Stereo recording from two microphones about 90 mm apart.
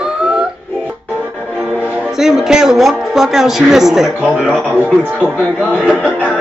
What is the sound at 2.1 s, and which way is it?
Speech, 5° right (ahead or behind).